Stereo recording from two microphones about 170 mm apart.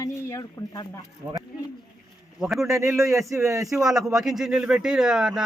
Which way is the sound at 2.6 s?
20° right (ahead or behind).